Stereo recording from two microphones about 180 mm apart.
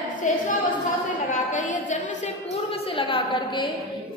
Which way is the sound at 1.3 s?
45° left (ahead or behind).